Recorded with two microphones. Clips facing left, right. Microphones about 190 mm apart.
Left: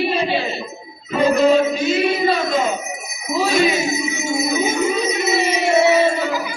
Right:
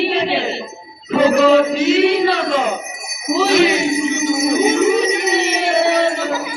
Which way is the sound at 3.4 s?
75° right (ahead or behind).